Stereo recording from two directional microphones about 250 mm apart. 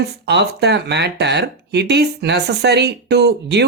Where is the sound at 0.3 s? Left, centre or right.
Right.